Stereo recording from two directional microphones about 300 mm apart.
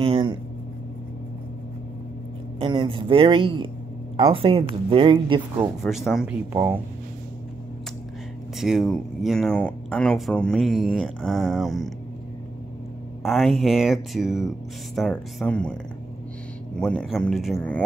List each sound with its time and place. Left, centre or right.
0.0 s a sound: centre
2.6 s speech: centre
5.9 s speech: centre
8.5 s speech: centre
13.2 s speech: centre
16.7 s speech: centre